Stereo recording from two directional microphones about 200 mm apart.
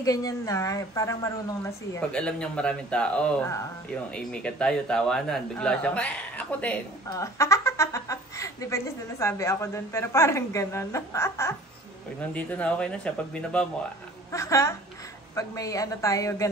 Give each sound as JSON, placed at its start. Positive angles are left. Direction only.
{"t": 0.0, "sound": "a woman's voice", "side_deg": 15}